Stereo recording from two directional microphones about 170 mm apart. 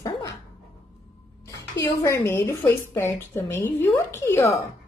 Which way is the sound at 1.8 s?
20° left (ahead or behind).